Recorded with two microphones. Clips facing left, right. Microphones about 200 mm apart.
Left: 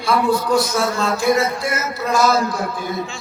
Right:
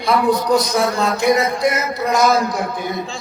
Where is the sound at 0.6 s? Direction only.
20° right (ahead or behind).